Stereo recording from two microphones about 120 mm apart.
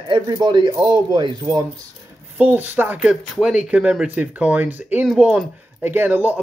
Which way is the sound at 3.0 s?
5° right (ahead or behind).